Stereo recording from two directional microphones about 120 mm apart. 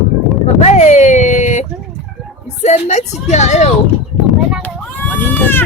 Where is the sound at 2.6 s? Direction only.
70° left (ahead or behind).